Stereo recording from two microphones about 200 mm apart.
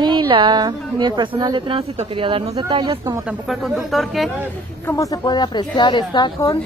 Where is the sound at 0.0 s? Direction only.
20° right (ahead or behind).